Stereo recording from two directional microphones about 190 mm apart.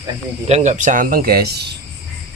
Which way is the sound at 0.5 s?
40° right (ahead or behind).